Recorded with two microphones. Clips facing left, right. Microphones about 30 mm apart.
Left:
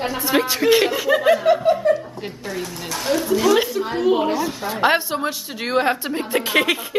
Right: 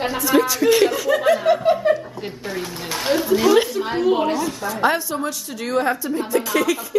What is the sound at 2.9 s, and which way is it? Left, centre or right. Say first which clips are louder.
A woman's voice: right 1 dB; centre.